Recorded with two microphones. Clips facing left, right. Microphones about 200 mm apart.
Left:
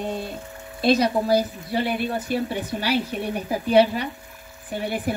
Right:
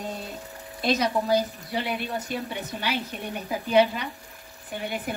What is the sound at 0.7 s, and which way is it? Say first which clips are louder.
Speech: left 5 dB; 30° left (ahead or behind).